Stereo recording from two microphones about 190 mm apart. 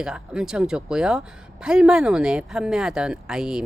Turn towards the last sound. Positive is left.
turn(degrees=-5)  # may be behind; listen again after turning